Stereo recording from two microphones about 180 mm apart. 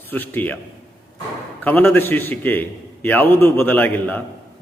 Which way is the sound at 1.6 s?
10° left (ahead or behind).